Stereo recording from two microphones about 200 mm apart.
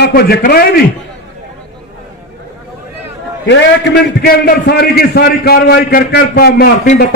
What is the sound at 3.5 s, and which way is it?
A man's voice, 55° left (ahead or behind).